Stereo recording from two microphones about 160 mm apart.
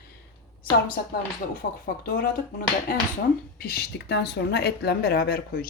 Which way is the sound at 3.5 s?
75° left (ahead or behind).